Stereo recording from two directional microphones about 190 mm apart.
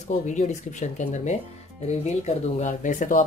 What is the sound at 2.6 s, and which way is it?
Speech, 40° left (ahead or behind).